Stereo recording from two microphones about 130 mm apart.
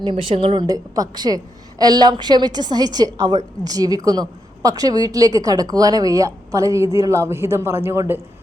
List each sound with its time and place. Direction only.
0.0 s a woman's voice: 40° right (ahead or behind)
0.7 s a woman's voice: 30° right (ahead or behind)